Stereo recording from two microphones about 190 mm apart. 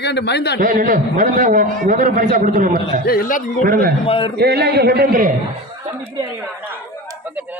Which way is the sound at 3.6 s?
50° right (ahead or behind).